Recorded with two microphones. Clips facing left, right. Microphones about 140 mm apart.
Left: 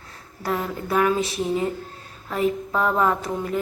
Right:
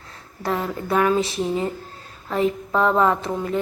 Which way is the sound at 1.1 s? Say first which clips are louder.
Right 2 dB; 30° right (ahead or behind).